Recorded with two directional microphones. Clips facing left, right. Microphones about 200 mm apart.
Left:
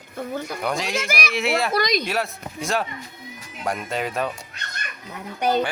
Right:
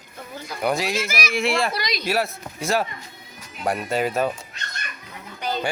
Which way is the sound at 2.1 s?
5° right (ahead or behind).